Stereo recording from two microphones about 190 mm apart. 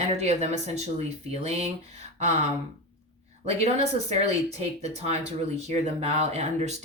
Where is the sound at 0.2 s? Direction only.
35° right (ahead or behind).